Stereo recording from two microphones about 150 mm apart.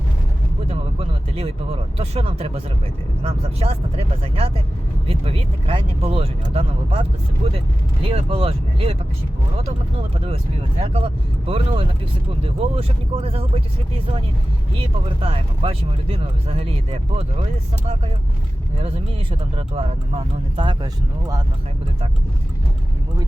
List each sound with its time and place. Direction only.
0.7 s speech: 40° right (ahead or behind)
10.2 s speech: 40° right (ahead or behind)
18.8 s speech: 40° right (ahead or behind)